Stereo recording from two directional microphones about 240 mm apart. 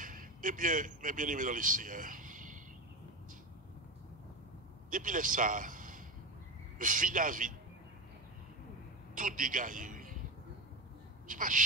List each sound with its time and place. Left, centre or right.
0.0 s a man's voice: right
4.9 s a man's voice: right
9.1 s a man's voice: right
11.2 s speech: right